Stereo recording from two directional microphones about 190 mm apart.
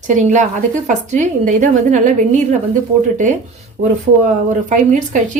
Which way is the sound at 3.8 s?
45° right (ahead or behind).